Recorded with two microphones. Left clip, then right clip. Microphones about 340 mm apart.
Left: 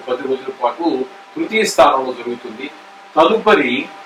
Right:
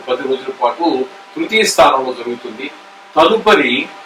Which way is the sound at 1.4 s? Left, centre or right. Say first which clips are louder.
Right 2 dB; centre.